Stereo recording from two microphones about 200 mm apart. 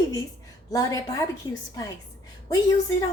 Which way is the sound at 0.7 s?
15° left (ahead or behind).